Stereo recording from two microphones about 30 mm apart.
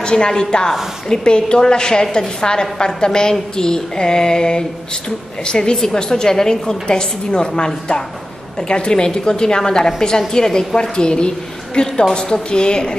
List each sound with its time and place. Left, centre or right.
0.0 s a woman's voice: left